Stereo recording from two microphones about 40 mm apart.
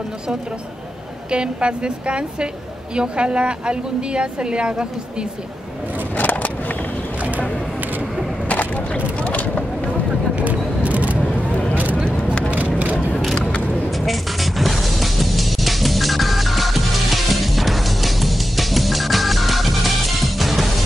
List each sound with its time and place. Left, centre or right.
1.3 s a woman's voice: right
6.1 s vehicle: left
8.5 s a sound: left
9.2 s vehicle: left
10.3 s single-lens reflex camera: right
11.7 s a sound: right
12.7 s vehicle: right
13.8 s music: centre